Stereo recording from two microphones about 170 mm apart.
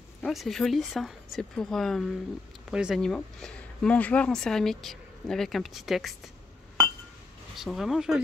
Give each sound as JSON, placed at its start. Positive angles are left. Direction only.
{"t": 0.2, "sound": "speech", "side_deg": 0}
{"t": 7.5, "sound": "speech", "side_deg": 0}